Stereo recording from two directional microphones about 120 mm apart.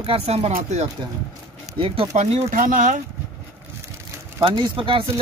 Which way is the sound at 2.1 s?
85° right.